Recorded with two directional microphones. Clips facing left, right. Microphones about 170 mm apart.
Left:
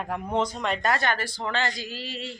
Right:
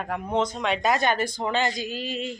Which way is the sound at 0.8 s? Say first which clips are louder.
Right 4 dB; 15° right (ahead or behind).